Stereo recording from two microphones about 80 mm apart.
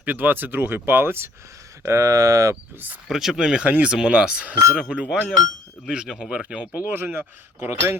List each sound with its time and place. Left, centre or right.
0.0 s speech: right
1.8 s speech: right
3.1 s speech: centre
6.9 s speech: right